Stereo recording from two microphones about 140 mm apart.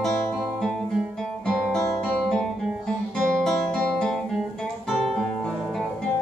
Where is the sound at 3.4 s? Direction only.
5° left (ahead or behind).